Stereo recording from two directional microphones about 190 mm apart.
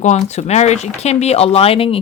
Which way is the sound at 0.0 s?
35° left (ahead or behind).